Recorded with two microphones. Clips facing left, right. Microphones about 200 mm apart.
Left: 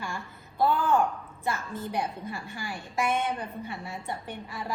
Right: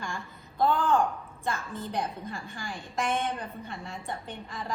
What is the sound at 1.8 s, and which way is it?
Speech, 10° left (ahead or behind).